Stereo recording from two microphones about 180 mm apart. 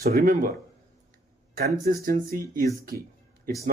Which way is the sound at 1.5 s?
55° right (ahead or behind).